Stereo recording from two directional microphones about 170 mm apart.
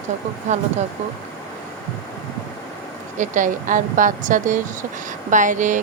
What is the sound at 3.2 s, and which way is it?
Speech, 50° right (ahead or behind).